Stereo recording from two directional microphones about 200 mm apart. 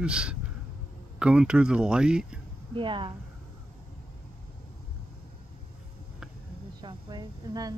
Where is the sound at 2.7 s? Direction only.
25° right (ahead or behind).